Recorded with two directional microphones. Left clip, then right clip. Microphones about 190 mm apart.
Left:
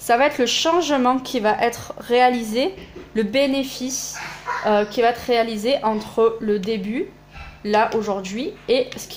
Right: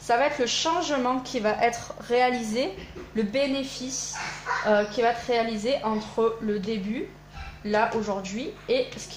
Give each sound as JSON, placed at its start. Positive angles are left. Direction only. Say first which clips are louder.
{"t": 0.0, "sound": "speech", "louder": "left 6 dB", "side_deg": 50}